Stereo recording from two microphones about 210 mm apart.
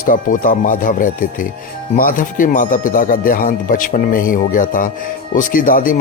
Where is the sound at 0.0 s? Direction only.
40° left (ahead or behind).